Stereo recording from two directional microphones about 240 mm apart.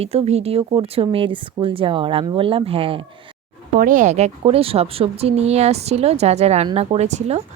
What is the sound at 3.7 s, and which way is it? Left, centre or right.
Speech, right.